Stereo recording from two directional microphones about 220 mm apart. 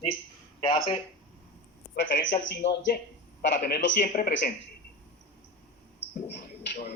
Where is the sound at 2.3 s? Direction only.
50° left (ahead or behind).